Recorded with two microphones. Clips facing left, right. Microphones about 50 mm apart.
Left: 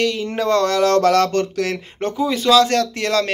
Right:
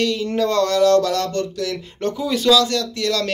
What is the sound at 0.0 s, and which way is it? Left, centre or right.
Speech, left.